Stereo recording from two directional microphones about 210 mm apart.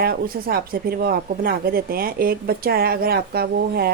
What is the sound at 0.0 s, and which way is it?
Speech, 45° right (ahead or behind).